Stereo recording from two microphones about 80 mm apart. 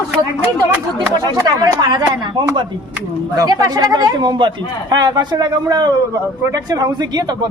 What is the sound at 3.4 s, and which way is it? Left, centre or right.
Speech, right.